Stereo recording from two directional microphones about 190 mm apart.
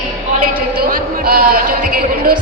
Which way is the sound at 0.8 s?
50° right (ahead or behind).